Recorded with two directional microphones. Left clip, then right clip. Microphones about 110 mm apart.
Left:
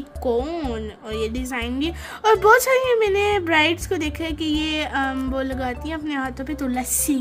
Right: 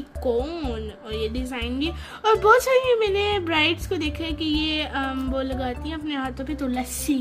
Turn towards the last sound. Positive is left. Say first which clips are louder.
# left 2 dB
turn(degrees=30)  # may be behind; listen again after turning